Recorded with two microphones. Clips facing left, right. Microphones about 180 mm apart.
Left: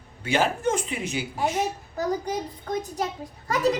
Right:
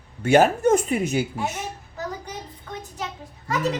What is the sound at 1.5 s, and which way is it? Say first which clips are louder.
Speech: left 6 dB; 40° left (ahead or behind).